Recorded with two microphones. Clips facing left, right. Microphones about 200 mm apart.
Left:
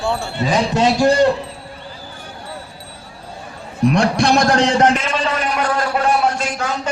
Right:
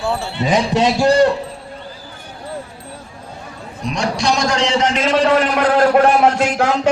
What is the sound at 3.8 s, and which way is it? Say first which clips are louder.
A man's voice: left 4 dB; 55° left (ahead or behind).